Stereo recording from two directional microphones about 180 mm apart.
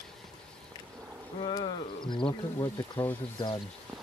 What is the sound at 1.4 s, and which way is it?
Speech, 25° left (ahead or behind).